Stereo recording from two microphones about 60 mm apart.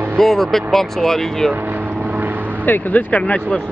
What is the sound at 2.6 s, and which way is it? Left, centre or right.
Speech, left.